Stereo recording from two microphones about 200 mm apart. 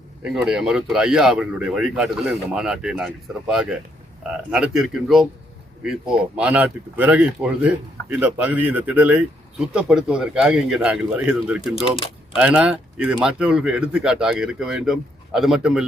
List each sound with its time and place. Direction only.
0.3 s speech: 5° right (ahead or behind)
11.9 s speech: 25° left (ahead or behind)
12.4 s speech: 5° right (ahead or behind)